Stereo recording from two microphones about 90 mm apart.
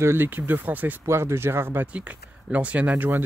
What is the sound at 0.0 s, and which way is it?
Speech, 25° right (ahead or behind).